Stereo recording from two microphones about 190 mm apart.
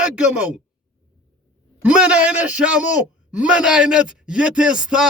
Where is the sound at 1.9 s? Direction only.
5° right (ahead or behind).